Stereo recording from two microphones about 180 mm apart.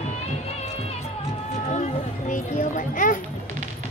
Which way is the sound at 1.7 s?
45° left (ahead or behind).